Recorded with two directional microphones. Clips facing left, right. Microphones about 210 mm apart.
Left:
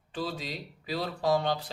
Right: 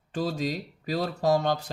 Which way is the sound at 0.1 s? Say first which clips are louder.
Right 6 dB; 45° right (ahead or behind).